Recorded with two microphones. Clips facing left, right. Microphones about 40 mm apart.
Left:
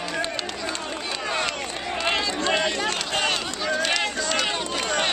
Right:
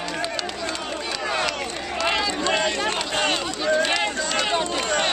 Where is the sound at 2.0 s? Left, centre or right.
Centre.